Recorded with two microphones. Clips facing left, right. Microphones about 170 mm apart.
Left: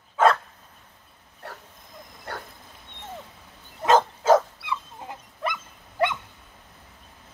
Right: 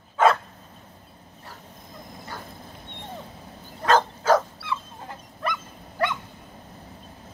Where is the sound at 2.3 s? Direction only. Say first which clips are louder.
Left 4 dB; 65° left (ahead or behind).